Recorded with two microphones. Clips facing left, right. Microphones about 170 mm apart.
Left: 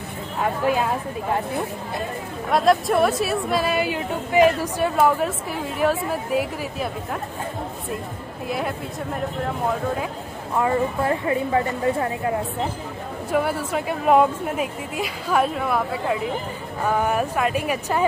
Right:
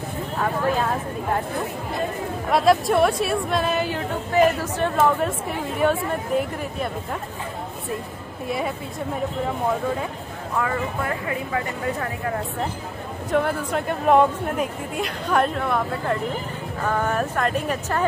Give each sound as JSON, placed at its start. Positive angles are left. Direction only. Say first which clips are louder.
{"t": 2.5, "sound": "a woman's voice", "louder": "even", "side_deg": 0}
{"t": 8.5, "sound": "a woman's voice", "louder": "even", "side_deg": 0}
{"t": 10.6, "sound": "a woman's voice", "louder": "left 5 dB", "side_deg": 25}
{"t": 13.3, "sound": "a woman's voice", "louder": "even", "side_deg": 5}